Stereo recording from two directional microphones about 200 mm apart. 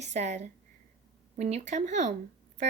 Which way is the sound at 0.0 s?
35° right (ahead or behind).